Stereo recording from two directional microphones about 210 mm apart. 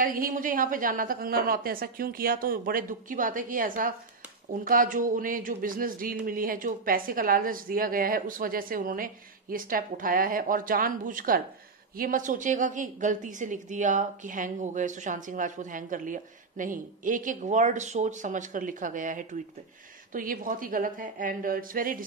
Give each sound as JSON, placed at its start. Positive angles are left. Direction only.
{"t": 0.0, "sound": "speech", "side_deg": -40}